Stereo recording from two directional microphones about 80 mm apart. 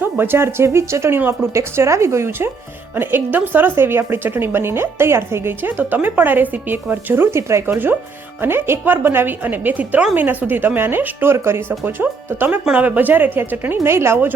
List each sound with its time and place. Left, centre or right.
0.0 s speech: right